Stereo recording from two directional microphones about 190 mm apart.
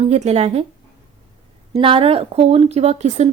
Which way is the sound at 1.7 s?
30° right (ahead or behind).